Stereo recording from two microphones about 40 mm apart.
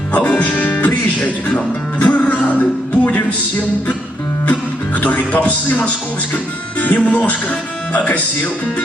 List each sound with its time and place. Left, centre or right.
0.1 s music: left
4.9 s speech: left